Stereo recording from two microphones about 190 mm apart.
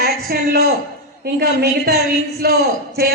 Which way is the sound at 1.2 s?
55° right (ahead or behind).